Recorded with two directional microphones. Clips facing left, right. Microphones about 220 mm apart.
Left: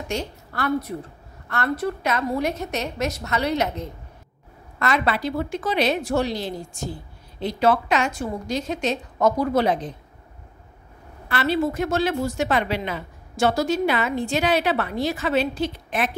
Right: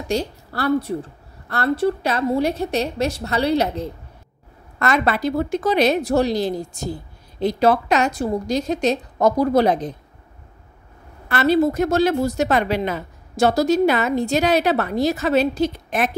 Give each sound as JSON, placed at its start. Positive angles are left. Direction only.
{"t": 0.1, "sound": "a woman's voice", "side_deg": -35}
{"t": 4.7, "sound": "a woman's voice", "side_deg": -45}
{"t": 11.2, "sound": "a woman's voice", "side_deg": -45}